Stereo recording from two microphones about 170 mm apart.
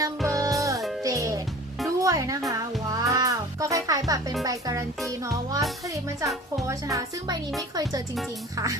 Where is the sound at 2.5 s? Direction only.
20° right (ahead or behind).